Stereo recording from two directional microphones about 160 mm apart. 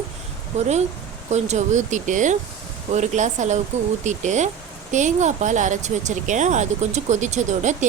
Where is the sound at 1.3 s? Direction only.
45° right (ahead or behind).